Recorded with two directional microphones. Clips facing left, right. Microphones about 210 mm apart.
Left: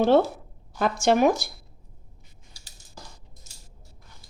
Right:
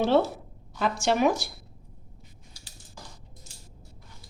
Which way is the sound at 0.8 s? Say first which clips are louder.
Left 4 dB; 45° left (ahead or behind).